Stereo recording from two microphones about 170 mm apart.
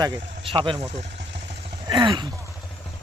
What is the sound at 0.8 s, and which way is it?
Speech, 40° right (ahead or behind).